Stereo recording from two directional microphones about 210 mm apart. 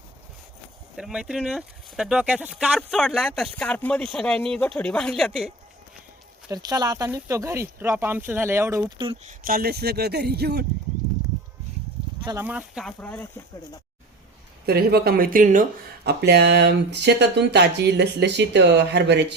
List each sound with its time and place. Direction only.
0.9 s speech: 5° right (ahead or behind)
6.5 s speech: 20° right (ahead or behind)
9.0 s speech: 25° right (ahead or behind)
9.4 s speech: 45° right (ahead or behind)
12.2 s speech: 15° right (ahead or behind); by 13.4 s 10° left (ahead or behind)
14.7 s speech: 50° right (ahead or behind)
16.0 s speech: 50° right (ahead or behind)